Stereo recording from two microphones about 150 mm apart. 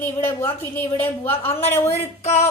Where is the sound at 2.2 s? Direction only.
50° left (ahead or behind).